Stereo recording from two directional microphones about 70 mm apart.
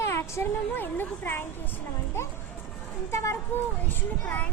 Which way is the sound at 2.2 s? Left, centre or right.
Left.